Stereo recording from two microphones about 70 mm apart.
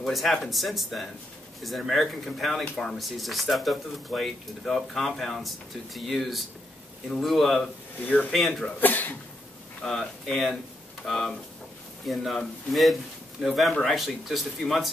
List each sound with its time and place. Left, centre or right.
0.0 s speech: centre
8.0 s speech: left
8.3 s speech: centre
8.8 s a sound: left
9.8 s speech: centre